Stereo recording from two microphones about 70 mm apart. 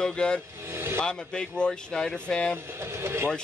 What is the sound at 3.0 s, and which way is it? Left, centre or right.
Speech, right.